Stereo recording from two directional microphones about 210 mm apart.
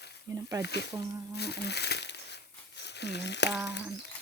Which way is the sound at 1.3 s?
50° left (ahead or behind).